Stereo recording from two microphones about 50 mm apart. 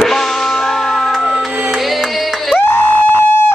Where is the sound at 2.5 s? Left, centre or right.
Left.